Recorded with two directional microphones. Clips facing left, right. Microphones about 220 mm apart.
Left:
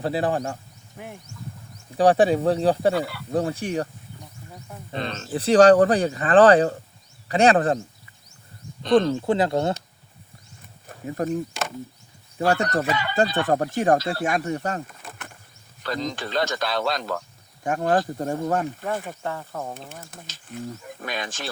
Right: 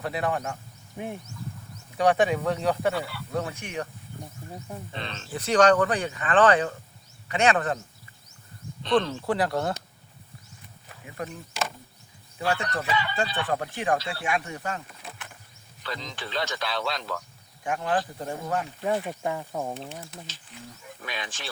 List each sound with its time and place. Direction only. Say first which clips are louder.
0.0 s speech: left 5 dB; 30° left (ahead or behind)
0.9 s speech: right 5 dB; 20° right (ahead or behind)
2.0 s speech: left 5 dB; 35° left (ahead or behind)
2.9 s speech: left 6 dB; 45° left (ahead or behind)
4.9 s speech: left 10 dB; 40° left (ahead or behind)
8.8 s speech: left 6 dB; 45° left (ahead or behind)
9.2 s speech: left 5 dB; 25° left (ahead or behind)
10.8 s a sound: left 8 dB; 40° left (ahead or behind)
12.4 s speech: left 6 dB; 45° left (ahead or behind)
18.8 s speech: right 1 dB; 15° right (ahead or behind)
19.9 s speech: right 1 dB; 45° left (ahead or behind)